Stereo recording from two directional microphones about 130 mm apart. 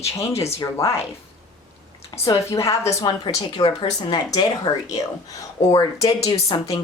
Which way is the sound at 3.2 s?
40° left (ahead or behind).